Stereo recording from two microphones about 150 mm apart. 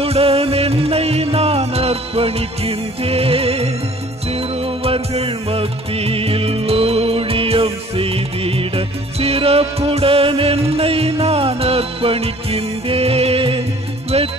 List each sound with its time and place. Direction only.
0.0 s music: 40° right (ahead or behind)